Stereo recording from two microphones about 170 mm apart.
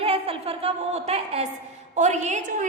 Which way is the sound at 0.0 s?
35° right (ahead or behind).